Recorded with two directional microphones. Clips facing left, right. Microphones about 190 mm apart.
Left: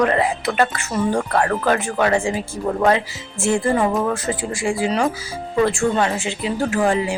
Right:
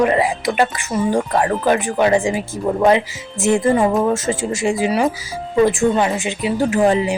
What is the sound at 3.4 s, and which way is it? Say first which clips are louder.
Speech: right 3 dB; 20° right (ahead or behind).